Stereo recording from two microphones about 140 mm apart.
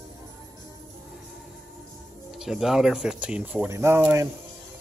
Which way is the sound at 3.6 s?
20° right (ahead or behind).